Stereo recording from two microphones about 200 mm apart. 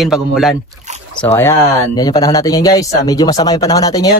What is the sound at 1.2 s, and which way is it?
Speech, 10° left (ahead or behind).